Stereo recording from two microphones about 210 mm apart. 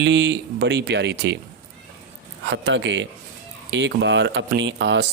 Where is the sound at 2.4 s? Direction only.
60° right (ahead or behind).